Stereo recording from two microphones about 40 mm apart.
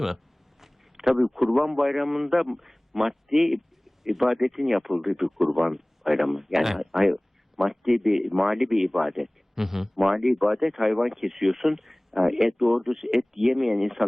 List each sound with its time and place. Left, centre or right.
0.6 s a man's voice: centre